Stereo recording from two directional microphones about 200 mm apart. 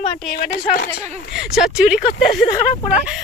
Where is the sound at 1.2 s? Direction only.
55° left (ahead or behind).